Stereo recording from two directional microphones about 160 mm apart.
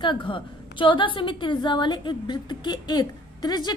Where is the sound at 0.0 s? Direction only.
30° left (ahead or behind).